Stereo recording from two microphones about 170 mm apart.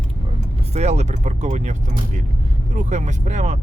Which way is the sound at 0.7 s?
40° right (ahead or behind).